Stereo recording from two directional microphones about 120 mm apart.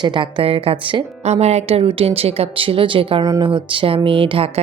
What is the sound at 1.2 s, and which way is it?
Speech, 65° right (ahead or behind).